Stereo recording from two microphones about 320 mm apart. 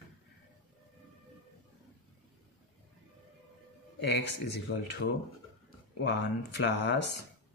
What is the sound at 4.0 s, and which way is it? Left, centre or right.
Speech, left.